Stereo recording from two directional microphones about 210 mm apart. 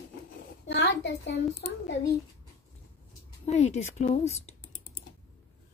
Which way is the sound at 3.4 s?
30° left (ahead or behind).